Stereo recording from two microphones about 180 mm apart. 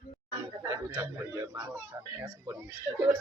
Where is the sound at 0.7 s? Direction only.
15° right (ahead or behind).